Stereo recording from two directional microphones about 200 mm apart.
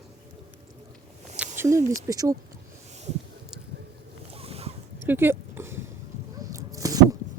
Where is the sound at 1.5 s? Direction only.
15° right (ahead or behind).